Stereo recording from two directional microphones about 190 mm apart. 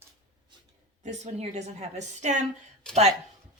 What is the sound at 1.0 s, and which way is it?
Speech, 35° right (ahead or behind).